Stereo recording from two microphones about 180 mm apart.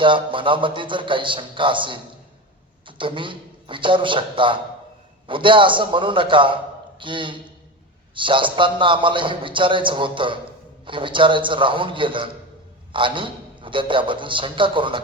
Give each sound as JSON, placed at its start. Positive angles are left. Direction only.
{"t": 0.0, "sound": "a man's voice", "side_deg": -30}